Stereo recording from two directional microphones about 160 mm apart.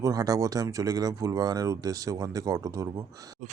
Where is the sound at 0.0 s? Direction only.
20° right (ahead or behind).